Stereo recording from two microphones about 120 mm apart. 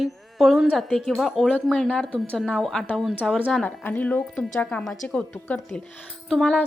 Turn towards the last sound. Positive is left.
turn(degrees=0)  # may be behind; listen again after turning